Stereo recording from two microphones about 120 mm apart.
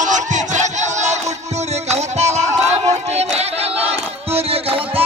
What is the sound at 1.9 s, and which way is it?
Music, 65° right (ahead or behind).